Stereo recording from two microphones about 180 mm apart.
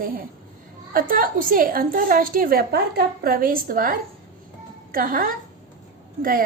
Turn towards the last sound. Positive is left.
turn(degrees=-55)  # may be behind; listen again after turning